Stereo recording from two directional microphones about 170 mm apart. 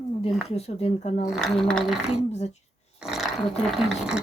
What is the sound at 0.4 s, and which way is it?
Speech, 35° left (ahead or behind).